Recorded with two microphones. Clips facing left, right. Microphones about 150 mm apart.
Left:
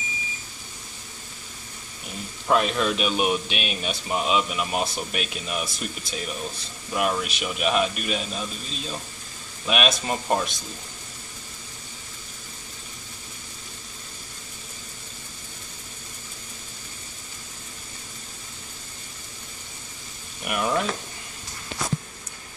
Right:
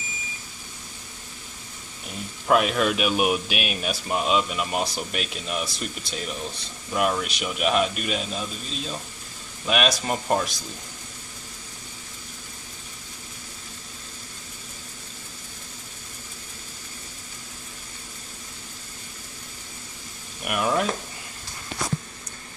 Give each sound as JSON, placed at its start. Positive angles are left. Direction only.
{"t": 2.4, "sound": "speech", "side_deg": -5}
{"t": 20.4, "sound": "sizzle", "side_deg": 0}